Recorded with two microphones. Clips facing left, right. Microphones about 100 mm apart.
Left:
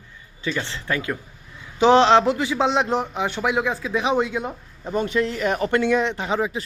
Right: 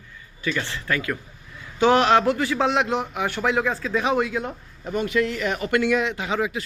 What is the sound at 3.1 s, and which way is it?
Speech, 25° left (ahead or behind).